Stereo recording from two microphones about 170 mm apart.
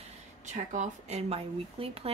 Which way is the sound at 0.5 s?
40° right (ahead or behind).